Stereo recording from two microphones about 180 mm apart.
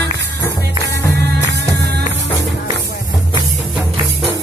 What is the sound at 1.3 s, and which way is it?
Music, 75° right (ahead or behind).